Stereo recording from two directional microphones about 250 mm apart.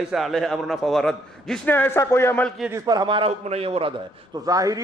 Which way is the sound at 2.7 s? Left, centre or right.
Centre.